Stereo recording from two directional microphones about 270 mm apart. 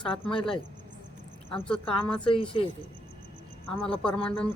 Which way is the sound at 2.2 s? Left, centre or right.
Centre.